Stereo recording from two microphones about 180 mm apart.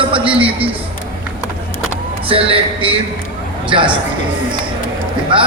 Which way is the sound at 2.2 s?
30° right (ahead or behind).